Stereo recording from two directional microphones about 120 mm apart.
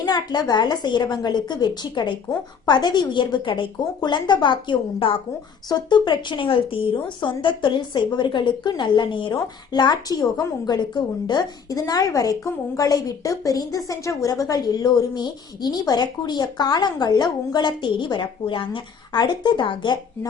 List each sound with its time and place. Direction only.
0.0 s speech: 35° left (ahead or behind)